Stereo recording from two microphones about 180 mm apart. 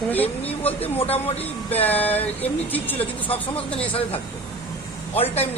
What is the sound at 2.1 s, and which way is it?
Speech, 35° left (ahead or behind).